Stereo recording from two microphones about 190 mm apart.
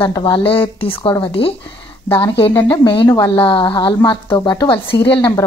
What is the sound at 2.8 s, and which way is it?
Speech, 25° left (ahead or behind).